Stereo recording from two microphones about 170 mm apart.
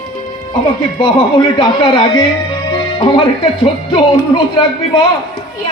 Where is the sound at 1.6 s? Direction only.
25° left (ahead or behind).